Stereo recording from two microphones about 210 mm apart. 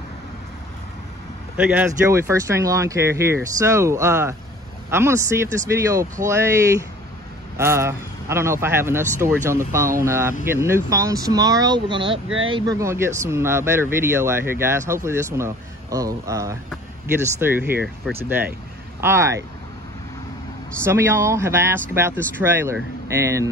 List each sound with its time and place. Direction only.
1.6 s speech: 5° right (ahead or behind)
7.5 s speech: 10° right (ahead or behind)
18.9 s speech: 10° right (ahead or behind)
20.8 s speech: 10° right (ahead or behind)